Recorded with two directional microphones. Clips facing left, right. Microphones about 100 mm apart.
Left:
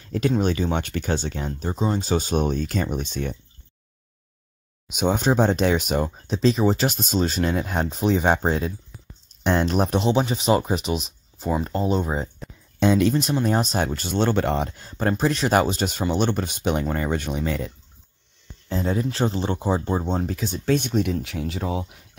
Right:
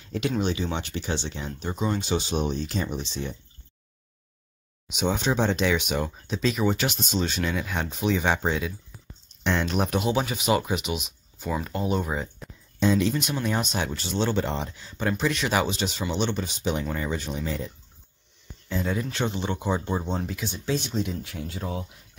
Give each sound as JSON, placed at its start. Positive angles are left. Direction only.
{"t": 0.0, "sound": "a sound", "side_deg": 45}
{"t": 0.4, "sound": "speech", "side_deg": 45}
{"t": 1.7, "sound": "speech", "side_deg": 35}
{"t": 4.9, "sound": "speech", "side_deg": 45}
{"t": 12.7, "sound": "speech", "side_deg": 60}
{"t": 13.1, "sound": "speech", "side_deg": 40}
{"t": 18.7, "sound": "speech", "side_deg": 30}